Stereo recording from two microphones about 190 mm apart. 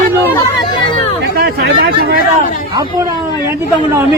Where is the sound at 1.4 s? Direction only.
55° right (ahead or behind).